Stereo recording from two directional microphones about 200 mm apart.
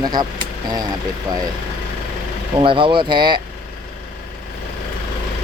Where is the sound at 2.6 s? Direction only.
25° right (ahead or behind).